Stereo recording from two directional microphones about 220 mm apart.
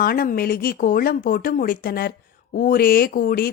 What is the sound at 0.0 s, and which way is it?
A woman's voice, 40° left (ahead or behind).